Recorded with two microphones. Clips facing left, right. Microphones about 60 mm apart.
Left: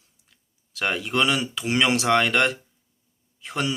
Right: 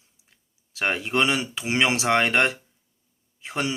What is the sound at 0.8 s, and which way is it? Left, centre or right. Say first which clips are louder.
Speech: even; right.